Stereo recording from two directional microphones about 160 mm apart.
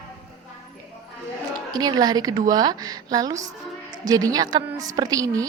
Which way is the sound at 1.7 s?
25° right (ahead or behind).